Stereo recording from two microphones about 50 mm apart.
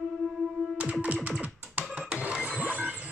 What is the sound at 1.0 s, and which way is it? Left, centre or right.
Music, right.